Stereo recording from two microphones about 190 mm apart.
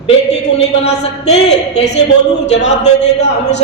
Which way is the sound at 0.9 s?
35° left (ahead or behind).